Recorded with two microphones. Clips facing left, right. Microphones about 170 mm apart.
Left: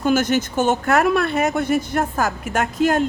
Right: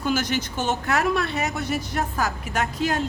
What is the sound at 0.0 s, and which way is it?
Speech, 50° left (ahead or behind).